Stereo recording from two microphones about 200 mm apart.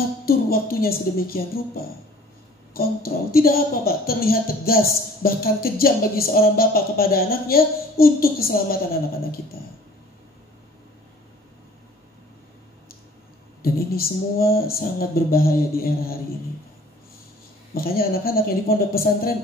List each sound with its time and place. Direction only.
0.2 s speech: 50° left (ahead or behind)
13.6 s speech: 50° left (ahead or behind)
17.7 s speech: 50° left (ahead or behind)